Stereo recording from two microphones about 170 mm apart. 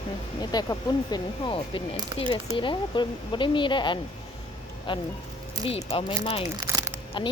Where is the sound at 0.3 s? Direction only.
25° left (ahead or behind).